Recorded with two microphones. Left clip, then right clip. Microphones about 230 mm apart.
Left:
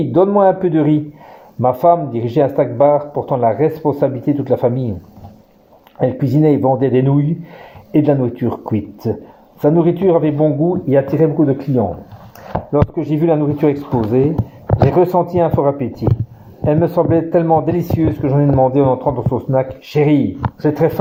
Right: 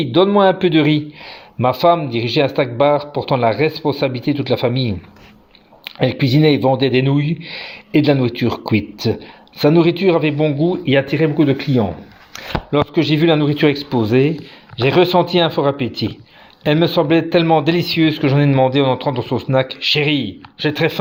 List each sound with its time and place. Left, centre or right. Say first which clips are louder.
0.1 s a man's voice: left 1 dB; right
5.8 s a sound: left 1 dB; right
6.3 s a man's voice: left 1 dB; right
18.5 s a man's voice: left 3 dB; right